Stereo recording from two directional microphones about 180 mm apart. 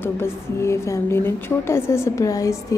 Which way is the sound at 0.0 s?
15° left (ahead or behind).